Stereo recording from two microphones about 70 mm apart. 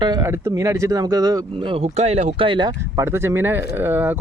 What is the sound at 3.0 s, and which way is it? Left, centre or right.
Speech, right.